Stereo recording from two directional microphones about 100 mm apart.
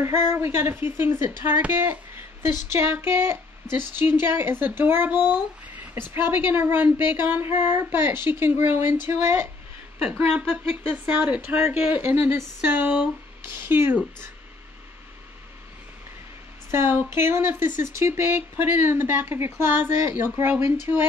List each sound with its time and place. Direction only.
0.0 s a woman's voice: 25° right (ahead or behind)
10.0 s a woman's voice: 15° right (ahead or behind)
16.7 s a woman's voice: 25° right (ahead or behind)